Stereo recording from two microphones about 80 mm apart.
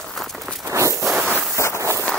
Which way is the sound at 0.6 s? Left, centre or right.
Right.